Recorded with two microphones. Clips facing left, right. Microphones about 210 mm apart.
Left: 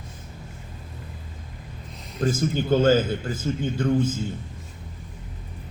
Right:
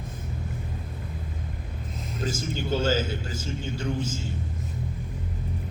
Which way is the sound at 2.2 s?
55° left (ahead or behind).